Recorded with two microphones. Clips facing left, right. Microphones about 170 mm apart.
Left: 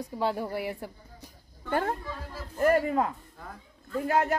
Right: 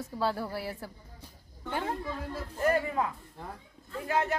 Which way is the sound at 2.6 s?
45° left (ahead or behind).